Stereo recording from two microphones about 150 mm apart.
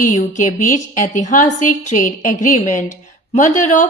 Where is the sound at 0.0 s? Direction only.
60° left (ahead or behind).